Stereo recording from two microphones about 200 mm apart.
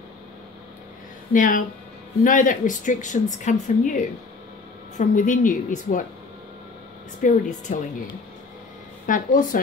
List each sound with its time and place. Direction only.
1.3 s a woman's voice: 40° left (ahead or behind)
4.9 s a woman's voice: 40° left (ahead or behind)
7.2 s a woman's voice: 40° left (ahead or behind)
9.0 s a woman's voice: 40° left (ahead or behind)